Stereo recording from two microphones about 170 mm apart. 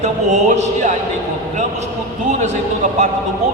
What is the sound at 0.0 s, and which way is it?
Speech, 45° right (ahead or behind).